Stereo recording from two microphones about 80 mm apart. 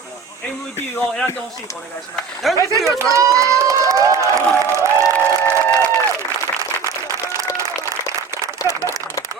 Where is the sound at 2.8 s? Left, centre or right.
Right.